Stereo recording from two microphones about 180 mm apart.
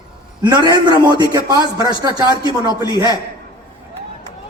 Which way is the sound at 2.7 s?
20° left (ahead or behind).